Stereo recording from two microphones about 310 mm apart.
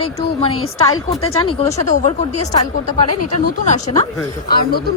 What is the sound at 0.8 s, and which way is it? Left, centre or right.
A woman's voice, centre.